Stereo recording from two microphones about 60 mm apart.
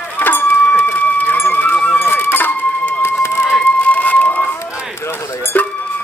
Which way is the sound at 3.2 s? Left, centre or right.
Left.